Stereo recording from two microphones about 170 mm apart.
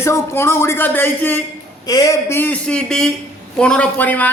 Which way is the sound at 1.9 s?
20° left (ahead or behind).